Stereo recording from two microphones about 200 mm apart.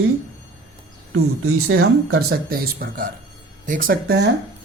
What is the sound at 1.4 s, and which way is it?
Speech, 90° right.